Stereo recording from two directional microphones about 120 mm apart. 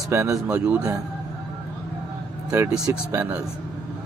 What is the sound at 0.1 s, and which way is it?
Speech, 25° right (ahead or behind).